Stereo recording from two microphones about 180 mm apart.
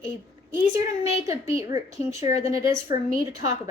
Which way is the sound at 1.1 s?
15° right (ahead or behind).